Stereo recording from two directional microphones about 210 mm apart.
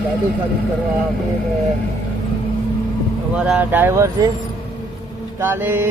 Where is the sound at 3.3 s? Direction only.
5° right (ahead or behind).